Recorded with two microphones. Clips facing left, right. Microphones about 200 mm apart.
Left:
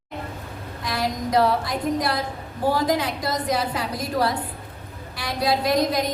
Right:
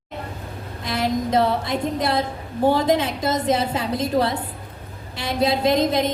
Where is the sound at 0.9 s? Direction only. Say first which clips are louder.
Right 3 dB; 25° right (ahead or behind).